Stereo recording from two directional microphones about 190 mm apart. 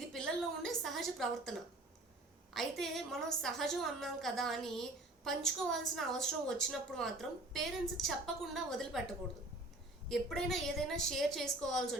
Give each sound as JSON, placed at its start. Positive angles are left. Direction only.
{"t": 0.1, "sound": "a woman's voice", "side_deg": 0}
{"t": 10.1, "sound": "a woman's voice", "side_deg": 0}